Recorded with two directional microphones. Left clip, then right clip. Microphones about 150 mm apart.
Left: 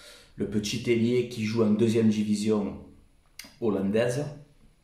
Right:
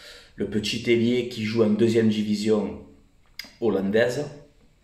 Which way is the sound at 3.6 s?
10° left (ahead or behind).